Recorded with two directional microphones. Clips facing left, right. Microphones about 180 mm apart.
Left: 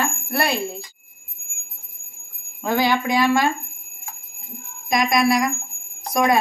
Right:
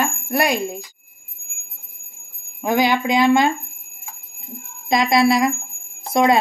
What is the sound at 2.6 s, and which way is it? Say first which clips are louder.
Speech: right 2 dB; 20° right (ahead or behind).